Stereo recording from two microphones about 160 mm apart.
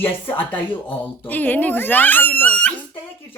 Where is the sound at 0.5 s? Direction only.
10° left (ahead or behind).